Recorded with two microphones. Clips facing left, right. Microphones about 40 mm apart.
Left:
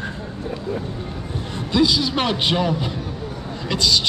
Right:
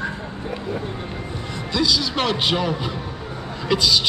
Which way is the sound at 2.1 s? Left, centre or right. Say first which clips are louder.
Even; centre.